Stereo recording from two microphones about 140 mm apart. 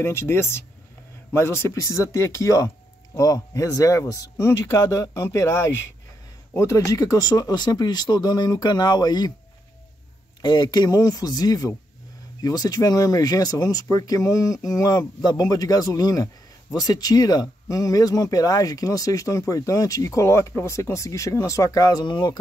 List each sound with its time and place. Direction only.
0.0 s speech: 15° left (ahead or behind)
10.4 s speech: 30° left (ahead or behind)